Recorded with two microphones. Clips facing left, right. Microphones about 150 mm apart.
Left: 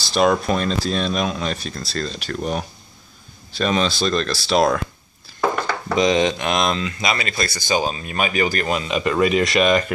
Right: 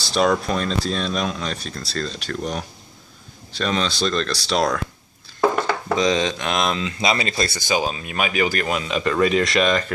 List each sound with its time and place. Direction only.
0.0 s speech: 5° left (ahead or behind)
5.9 s speech: 15° left (ahead or behind)
6.5 s speech: 5° right (ahead or behind)
6.8 s speech: 25° right (ahead or behind)
7.6 s speech: 5° right (ahead or behind); by 9.9 s 10° left (ahead or behind)